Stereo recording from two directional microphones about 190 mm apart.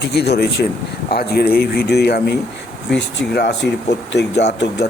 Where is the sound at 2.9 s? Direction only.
5° left (ahead or behind).